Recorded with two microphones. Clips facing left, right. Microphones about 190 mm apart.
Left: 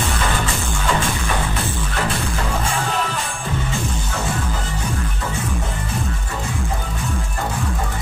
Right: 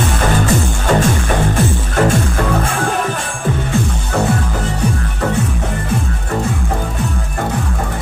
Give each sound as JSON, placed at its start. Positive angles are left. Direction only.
{"t": 0.5, "sound": "music", "side_deg": -45}